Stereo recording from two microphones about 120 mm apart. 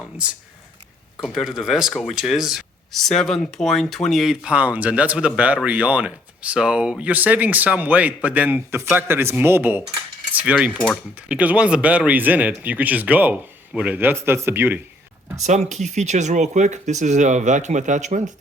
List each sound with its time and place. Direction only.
0.2 s speech: 10° right (ahead or behind)
1.2 s speech: centre (ahead or behind); by 14.8 s 20° right (ahead or behind)
15.4 s speech: 75° right (ahead or behind)